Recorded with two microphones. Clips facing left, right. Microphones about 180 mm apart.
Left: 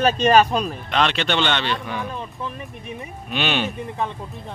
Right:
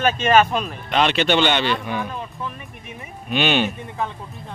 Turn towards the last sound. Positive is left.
turn(degrees=0)  # may be behind; listen again after turning